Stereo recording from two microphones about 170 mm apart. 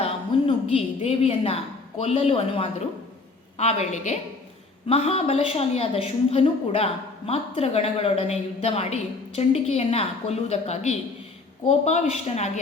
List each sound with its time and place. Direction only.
0.0 s a woman's voice: 35° left (ahead or behind)